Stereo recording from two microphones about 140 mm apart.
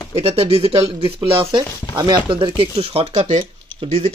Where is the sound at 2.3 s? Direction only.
40° right (ahead or behind).